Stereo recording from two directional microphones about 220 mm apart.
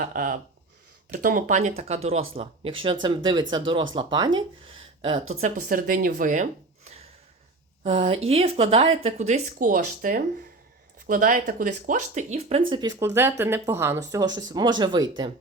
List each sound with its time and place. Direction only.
0.0 s speech: 40° right (ahead or behind); by 5.2 s 25° right (ahead or behind)
5.3 s speech: 35° right (ahead or behind)
12.7 s speech: 20° right (ahead or behind)